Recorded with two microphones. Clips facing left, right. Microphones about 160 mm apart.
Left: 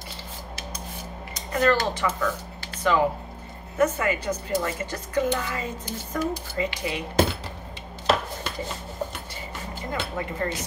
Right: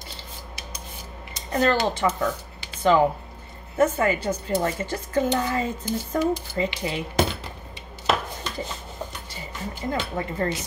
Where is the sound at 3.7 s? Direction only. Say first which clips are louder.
Right 2 dB; 30° right (ahead or behind).